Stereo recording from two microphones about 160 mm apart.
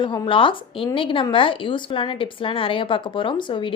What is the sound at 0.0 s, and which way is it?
A woman's voice, 30° left (ahead or behind).